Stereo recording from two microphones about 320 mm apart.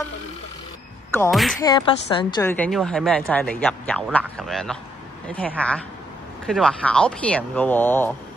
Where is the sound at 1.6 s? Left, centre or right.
Centre.